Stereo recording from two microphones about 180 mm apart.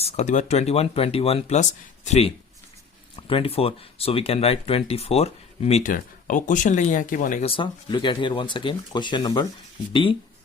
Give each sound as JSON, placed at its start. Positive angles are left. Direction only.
{"t": 0.0, "sound": "speech", "side_deg": 40}
{"t": 7.4, "sound": "speech", "side_deg": 30}